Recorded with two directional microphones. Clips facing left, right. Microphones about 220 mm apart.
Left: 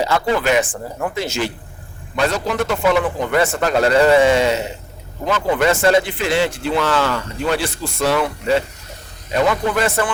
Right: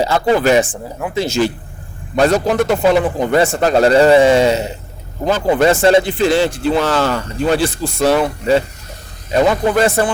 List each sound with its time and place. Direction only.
0.0 s a man's voice: 35° right (ahead or behind)
0.7 s speech: 5° right (ahead or behind)
1.1 s a man's voice: 30° right (ahead or behind)
2.5 s a man's voice: 30° right (ahead or behind)